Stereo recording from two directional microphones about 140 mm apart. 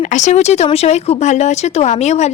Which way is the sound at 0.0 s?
60° left (ahead or behind).